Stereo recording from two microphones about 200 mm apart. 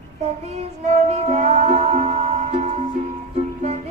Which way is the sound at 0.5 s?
35° right (ahead or behind).